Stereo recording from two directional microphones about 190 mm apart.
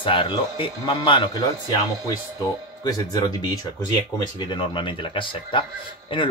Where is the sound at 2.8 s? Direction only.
20° left (ahead or behind).